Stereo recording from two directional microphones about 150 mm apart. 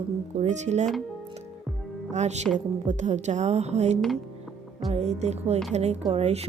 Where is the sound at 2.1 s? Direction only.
50° right (ahead or behind).